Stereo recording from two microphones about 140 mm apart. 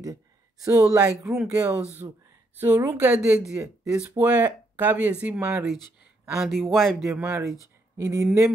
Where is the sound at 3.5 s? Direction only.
20° right (ahead or behind); by 7.1 s centre (ahead or behind).